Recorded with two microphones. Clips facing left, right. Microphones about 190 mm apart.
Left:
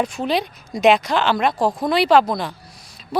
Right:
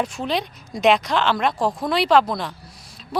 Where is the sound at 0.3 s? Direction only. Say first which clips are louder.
Left 3 dB; 5° left (ahead or behind).